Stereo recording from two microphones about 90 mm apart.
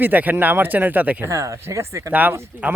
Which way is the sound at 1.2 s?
35° right (ahead or behind).